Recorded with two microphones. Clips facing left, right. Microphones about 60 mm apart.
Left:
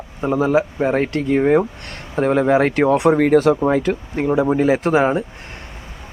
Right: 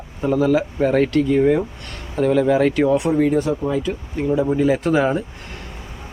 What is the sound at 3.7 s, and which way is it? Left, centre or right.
Speech, left.